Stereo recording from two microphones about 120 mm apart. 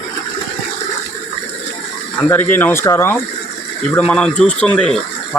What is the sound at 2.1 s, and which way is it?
Speech, 15° left (ahead or behind).